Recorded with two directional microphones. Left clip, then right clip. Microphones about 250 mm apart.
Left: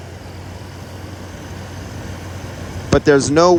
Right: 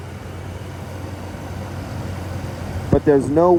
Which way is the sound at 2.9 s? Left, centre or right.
Right.